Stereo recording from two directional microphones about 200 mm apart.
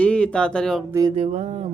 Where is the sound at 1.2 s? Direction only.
35° right (ahead or behind).